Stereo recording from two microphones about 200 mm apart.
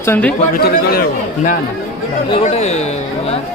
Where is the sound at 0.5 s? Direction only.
50° left (ahead or behind).